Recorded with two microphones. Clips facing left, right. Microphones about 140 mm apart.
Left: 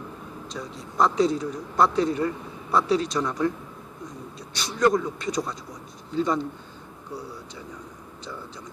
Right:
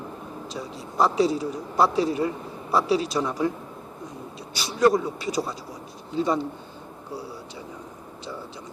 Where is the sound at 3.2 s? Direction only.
25° right (ahead or behind).